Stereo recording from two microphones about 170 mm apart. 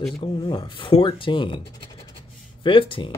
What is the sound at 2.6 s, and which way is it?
Speech, 30° left (ahead or behind).